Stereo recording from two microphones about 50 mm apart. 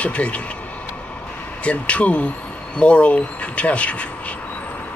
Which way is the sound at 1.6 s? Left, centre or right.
Left.